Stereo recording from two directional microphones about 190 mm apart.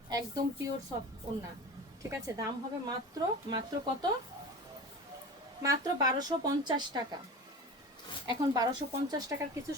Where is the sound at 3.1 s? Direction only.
20° right (ahead or behind).